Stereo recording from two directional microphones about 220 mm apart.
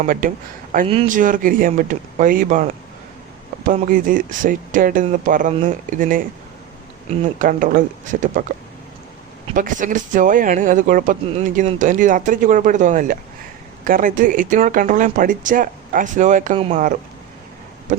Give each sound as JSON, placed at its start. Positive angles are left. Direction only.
{"t": 0.0, "sound": "speech", "side_deg": -40}
{"t": 9.6, "sound": "speech", "side_deg": -35}